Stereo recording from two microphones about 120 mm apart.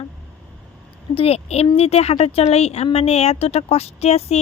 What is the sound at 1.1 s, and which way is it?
A woman's voice, 55° left (ahead or behind).